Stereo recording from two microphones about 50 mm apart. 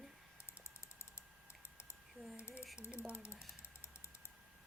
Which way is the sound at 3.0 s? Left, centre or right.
Left.